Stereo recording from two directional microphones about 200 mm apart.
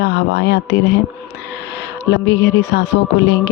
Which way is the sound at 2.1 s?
60° left (ahead or behind).